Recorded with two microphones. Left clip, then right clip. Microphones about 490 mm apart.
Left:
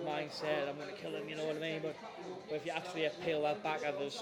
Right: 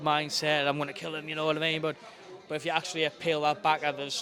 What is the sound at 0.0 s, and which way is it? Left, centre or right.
A man's voice, right.